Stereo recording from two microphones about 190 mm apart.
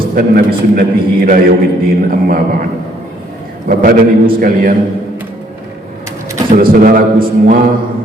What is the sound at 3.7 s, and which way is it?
A man's voice, 50° right (ahead or behind).